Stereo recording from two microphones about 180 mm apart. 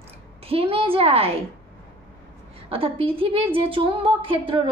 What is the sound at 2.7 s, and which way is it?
Speech, 30° right (ahead or behind).